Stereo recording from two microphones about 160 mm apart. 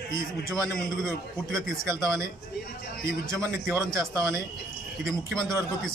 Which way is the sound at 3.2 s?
15° right (ahead or behind).